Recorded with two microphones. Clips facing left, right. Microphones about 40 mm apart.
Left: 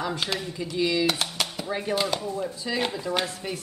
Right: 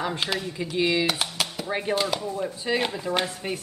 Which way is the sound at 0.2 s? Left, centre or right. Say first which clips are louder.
Right 1 dB; centre.